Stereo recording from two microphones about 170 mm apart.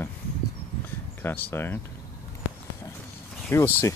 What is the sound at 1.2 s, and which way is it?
Speech, 10° left (ahead or behind).